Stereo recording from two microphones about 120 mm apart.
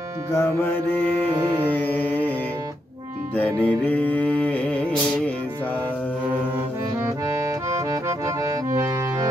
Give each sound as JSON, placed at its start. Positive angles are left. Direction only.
{"t": 0.3, "sound": "music", "side_deg": 20}
{"t": 3.6, "sound": "music", "side_deg": 15}
{"t": 7.6, "sound": "accordion", "side_deg": -25}